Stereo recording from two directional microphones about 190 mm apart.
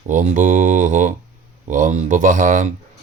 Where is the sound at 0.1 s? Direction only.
45° right (ahead or behind).